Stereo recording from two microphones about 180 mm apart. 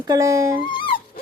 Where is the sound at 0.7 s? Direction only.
25° left (ahead or behind).